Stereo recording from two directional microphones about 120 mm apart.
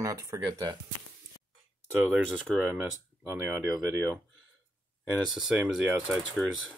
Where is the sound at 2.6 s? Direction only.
10° right (ahead or behind).